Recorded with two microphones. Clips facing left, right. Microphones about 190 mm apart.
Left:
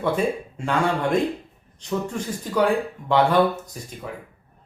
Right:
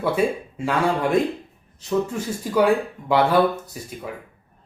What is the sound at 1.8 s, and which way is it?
Speech, 5° right (ahead or behind).